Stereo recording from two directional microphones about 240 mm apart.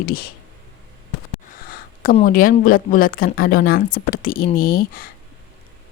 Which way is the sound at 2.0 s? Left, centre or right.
Left.